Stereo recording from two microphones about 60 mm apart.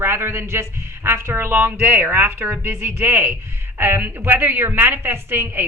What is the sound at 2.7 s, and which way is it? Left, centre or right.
A woman's voice, right.